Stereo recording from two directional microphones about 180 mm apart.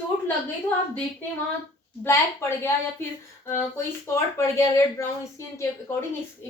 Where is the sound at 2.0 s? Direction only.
15° left (ahead or behind).